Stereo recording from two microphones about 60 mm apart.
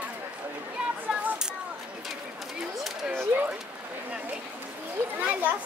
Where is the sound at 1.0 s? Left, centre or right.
Right.